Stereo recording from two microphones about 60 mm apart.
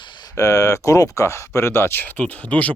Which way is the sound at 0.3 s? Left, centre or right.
Left.